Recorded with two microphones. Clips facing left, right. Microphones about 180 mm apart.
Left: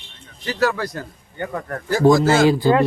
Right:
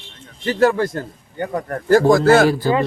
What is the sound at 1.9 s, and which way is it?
Speech, 60° right (ahead or behind).